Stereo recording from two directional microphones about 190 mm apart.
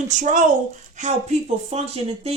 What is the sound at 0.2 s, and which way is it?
Speech, 40° right (ahead or behind).